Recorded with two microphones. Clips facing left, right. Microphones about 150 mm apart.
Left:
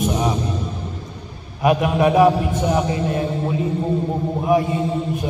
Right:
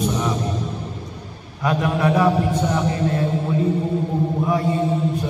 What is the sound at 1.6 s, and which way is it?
A man's voice, 15° left (ahead or behind).